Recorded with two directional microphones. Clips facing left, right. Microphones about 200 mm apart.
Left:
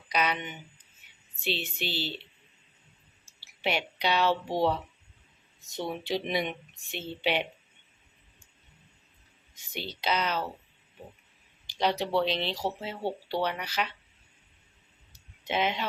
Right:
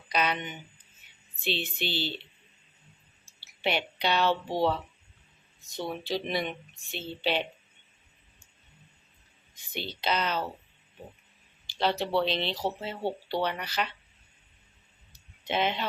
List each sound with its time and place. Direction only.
0.1 s speech: 10° left (ahead or behind)
3.6 s speech: 5° left (ahead or behind)
10.0 s speech: 10° left (ahead or behind)
11.6 s a sound: 15° left (ahead or behind)
12.1 s speech: 10° left (ahead or behind)
15.4 s speech: 10° left (ahead or behind)